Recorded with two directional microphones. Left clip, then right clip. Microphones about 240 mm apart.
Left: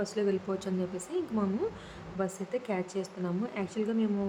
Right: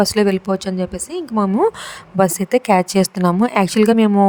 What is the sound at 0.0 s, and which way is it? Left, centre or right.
Speech, right.